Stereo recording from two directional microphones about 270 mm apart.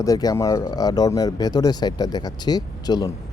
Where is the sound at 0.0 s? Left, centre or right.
Centre.